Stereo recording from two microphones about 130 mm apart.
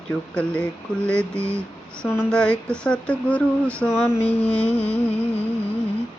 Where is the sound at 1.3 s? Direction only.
20° right (ahead or behind).